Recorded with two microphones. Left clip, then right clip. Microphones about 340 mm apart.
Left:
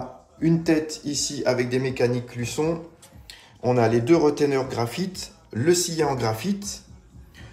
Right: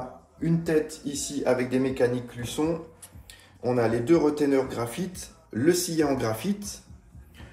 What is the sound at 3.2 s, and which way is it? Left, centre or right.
Speech, centre.